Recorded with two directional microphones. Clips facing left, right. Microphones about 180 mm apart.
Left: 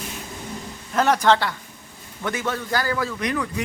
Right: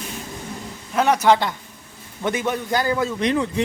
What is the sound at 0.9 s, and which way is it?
A man's voice, 5° right (ahead or behind).